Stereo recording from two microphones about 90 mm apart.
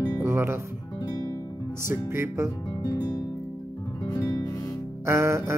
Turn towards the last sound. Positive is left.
turn(degrees=-30)  # may be behind; listen again after turning